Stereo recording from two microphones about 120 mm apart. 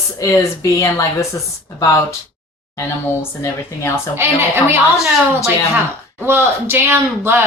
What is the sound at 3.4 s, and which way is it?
Speech, 25° left (ahead or behind).